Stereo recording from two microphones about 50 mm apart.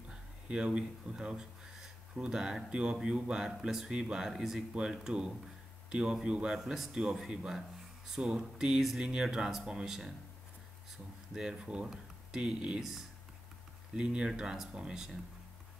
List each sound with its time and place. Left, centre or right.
0.1 s speech: centre
6.6 s speech: centre
11.3 s speech: centre
13.9 s speech: centre